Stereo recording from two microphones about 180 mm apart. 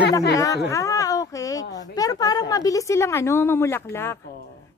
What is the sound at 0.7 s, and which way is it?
A woman's voice, 20° left (ahead or behind).